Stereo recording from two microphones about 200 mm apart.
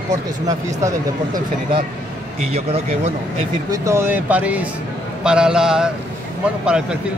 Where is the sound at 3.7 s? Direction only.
15° right (ahead or behind).